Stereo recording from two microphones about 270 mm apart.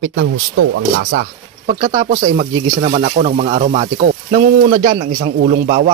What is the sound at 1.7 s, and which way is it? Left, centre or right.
Speech, centre.